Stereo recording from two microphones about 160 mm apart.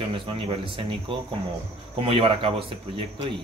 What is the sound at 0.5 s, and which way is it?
Speech, 35° right (ahead or behind).